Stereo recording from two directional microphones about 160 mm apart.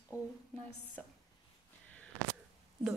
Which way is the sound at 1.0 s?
5° left (ahead or behind).